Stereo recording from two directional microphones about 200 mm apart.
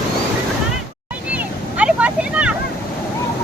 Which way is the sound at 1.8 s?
5° right (ahead or behind).